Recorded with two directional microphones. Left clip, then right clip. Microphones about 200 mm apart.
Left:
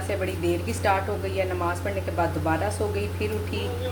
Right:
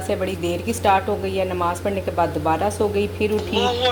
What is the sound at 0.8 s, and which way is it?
Speech, 40° right (ahead or behind).